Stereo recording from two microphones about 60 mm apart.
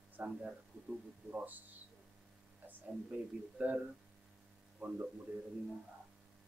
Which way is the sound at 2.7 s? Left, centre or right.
Right.